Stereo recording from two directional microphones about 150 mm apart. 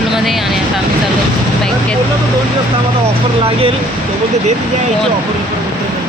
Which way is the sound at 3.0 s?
40° right (ahead or behind).